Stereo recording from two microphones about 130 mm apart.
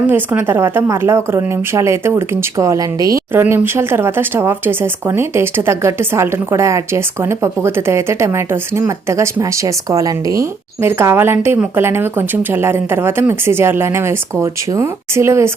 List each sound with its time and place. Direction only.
0.1 s speech: 15° right (ahead or behind)
3.3 s speech: 15° right (ahead or behind)